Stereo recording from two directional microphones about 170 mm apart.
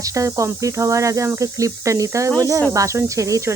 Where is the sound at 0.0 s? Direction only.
20° right (ahead or behind).